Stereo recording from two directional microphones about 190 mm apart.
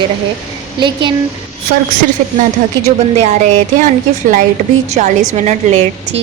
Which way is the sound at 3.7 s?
45° right (ahead or behind).